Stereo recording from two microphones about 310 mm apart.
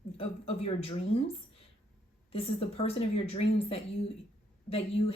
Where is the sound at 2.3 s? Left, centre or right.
Centre.